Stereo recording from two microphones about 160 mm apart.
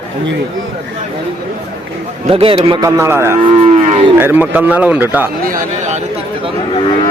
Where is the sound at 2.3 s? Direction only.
35° right (ahead or behind).